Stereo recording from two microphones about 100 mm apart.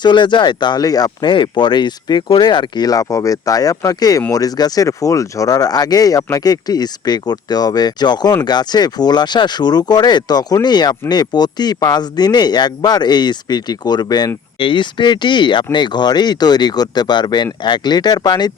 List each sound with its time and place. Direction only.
0.0 s speech: 50° left (ahead or behind)